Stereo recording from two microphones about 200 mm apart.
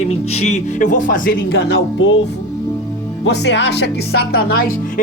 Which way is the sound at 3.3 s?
60° left (ahead or behind).